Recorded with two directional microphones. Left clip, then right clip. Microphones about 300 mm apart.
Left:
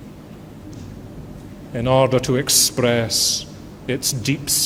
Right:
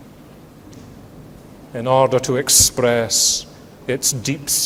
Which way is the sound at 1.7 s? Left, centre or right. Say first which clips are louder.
Right 1 dB; right.